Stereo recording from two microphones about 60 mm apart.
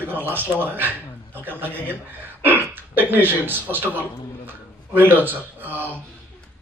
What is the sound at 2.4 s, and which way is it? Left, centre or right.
Hiccup, right.